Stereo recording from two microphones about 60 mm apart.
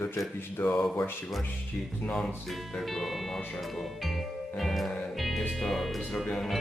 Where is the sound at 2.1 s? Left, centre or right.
Centre.